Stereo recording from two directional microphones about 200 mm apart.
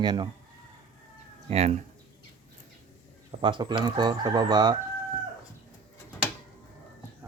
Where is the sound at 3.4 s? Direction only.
25° right (ahead or behind).